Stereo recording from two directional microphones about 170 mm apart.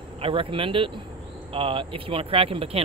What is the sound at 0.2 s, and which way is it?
Speech, 30° right (ahead or behind).